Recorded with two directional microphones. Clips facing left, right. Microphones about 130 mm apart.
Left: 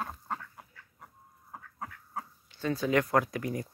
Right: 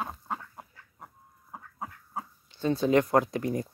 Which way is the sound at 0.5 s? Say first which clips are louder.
Right 4 dB; 35° right (ahead or behind).